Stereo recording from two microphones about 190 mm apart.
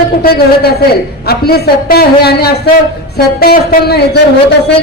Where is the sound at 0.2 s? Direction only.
55° left (ahead or behind).